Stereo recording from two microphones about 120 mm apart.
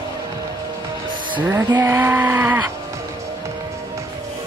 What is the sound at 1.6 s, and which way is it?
Vehicle, 30° right (ahead or behind).